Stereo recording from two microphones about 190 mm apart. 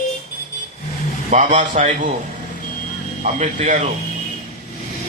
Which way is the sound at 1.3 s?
35° right (ahead or behind).